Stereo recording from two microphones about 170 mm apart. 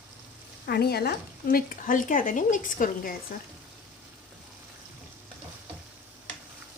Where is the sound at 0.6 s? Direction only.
70° left (ahead or behind); by 3.2 s 50° left (ahead or behind).